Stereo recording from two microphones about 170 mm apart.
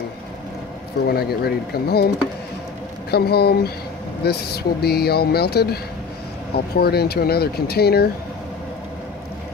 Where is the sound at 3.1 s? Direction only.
70° left (ahead or behind).